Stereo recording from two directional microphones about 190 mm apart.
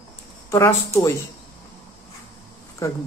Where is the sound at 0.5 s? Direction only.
15° left (ahead or behind).